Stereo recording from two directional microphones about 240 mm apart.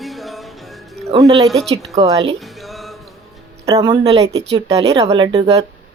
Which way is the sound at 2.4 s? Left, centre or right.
Centre.